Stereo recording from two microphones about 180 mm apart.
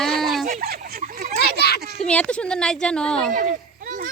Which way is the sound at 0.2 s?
Centre (ahead or behind).